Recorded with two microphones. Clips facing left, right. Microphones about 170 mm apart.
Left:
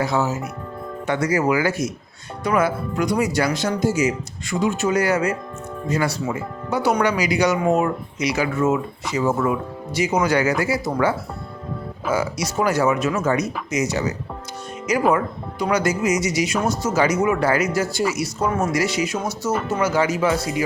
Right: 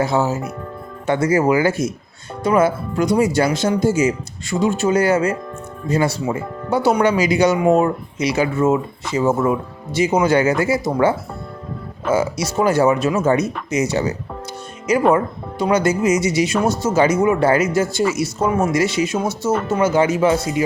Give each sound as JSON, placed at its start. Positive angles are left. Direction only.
{"t": 0.0, "sound": "speech", "side_deg": -25}
{"t": 12.1, "sound": "speech", "side_deg": -25}